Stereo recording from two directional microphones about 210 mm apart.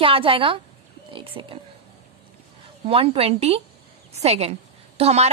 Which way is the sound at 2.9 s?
25° right (ahead or behind).